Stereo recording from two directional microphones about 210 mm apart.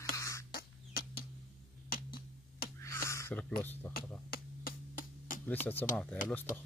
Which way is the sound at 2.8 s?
15° left (ahead or behind).